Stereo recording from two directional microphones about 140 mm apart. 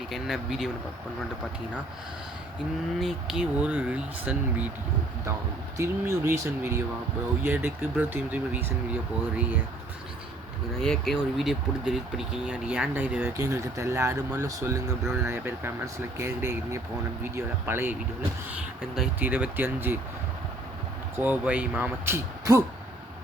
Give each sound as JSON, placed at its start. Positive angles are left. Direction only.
{"t": 0.1, "sound": "speech", "side_deg": 0}
{"t": 3.0, "sound": "speech", "side_deg": 0}
{"t": 5.7, "sound": "speech", "side_deg": -20}
{"t": 10.8, "sound": "speech", "side_deg": 0}
{"t": 13.3, "sound": "speech", "side_deg": -20}
{"t": 19.2, "sound": "speech", "side_deg": -10}
{"t": 21.2, "sound": "speech", "side_deg": -10}